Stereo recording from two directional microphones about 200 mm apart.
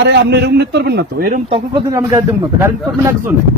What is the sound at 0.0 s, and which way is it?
A man's voice, 60° right (ahead or behind).